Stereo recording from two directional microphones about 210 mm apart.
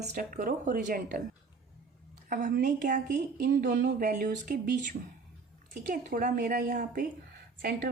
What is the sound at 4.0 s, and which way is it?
A woman's voice, 40° right (ahead or behind).